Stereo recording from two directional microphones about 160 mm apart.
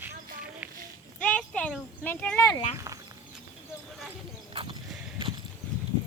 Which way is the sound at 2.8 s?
20° right (ahead or behind).